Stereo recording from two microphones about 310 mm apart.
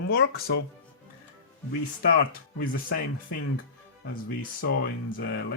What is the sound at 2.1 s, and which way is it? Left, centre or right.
Speech, left.